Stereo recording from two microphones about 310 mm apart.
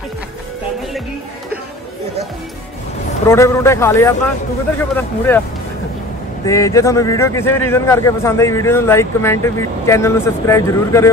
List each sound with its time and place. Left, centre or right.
3.3 s a man's voice: centre
6.4 s a man's voice: centre